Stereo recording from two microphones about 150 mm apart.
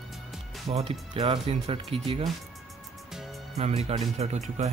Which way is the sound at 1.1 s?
30° right (ahead or behind).